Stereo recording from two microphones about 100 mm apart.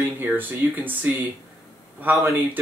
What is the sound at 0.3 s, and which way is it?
Speech, 20° right (ahead or behind).